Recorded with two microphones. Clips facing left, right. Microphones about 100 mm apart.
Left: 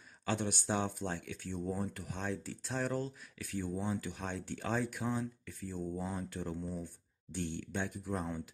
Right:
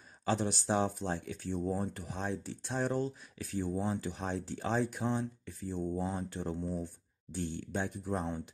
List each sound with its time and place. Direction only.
0.2 s speech: 30° right (ahead or behind)